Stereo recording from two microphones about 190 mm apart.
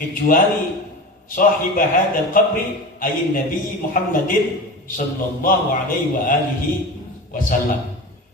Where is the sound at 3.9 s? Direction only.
45° left (ahead or behind).